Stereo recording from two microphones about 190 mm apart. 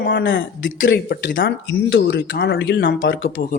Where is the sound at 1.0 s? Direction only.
55° left (ahead or behind).